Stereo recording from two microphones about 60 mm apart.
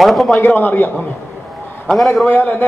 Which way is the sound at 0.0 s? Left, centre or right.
Centre.